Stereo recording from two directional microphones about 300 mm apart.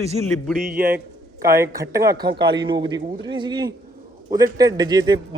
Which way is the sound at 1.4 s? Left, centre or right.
Centre.